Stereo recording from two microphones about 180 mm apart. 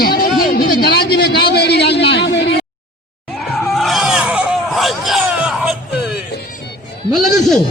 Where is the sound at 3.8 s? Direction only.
Centre (ahead or behind).